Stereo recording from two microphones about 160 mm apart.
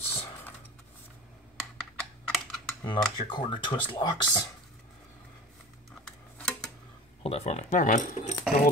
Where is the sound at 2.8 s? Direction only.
30° left (ahead or behind).